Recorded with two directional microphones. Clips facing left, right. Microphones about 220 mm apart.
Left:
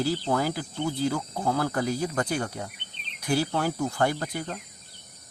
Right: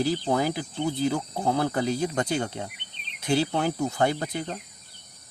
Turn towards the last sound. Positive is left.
turn(degrees=-20)  # may be behind; listen again after turning